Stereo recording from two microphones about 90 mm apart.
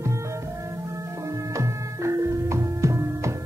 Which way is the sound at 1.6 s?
35° right (ahead or behind).